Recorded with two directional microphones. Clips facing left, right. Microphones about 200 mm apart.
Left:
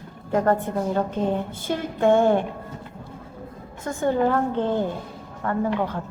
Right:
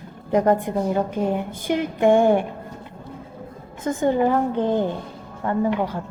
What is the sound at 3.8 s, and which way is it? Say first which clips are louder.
A woman's voice: right 2 dB; 15° right (ahead or behind).